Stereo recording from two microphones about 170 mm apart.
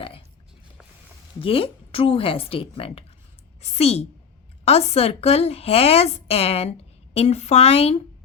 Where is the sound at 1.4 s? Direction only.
35° left (ahead or behind).